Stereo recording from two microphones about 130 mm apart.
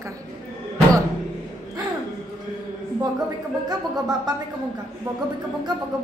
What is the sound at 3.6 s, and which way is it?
Speech, 30° right (ahead or behind).